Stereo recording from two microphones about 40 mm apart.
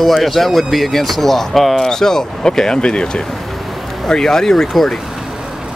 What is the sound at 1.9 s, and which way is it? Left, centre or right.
Speech, centre.